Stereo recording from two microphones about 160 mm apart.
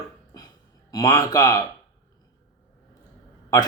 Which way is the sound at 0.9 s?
25° left (ahead or behind).